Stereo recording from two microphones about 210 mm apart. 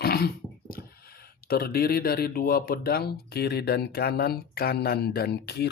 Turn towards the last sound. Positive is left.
turn(degrees=50)  # may be behind; listen again after turning